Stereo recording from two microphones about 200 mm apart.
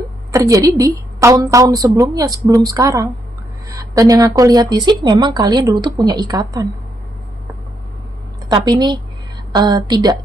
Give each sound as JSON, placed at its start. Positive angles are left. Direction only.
{"t": 0.3, "sound": "a woman's voice", "side_deg": -15}
{"t": 8.5, "sound": "speech", "side_deg": -20}